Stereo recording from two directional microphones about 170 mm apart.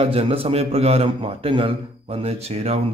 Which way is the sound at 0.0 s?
35° right (ahead or behind).